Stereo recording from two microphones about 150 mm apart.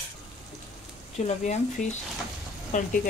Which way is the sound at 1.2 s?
50° left (ahead or behind).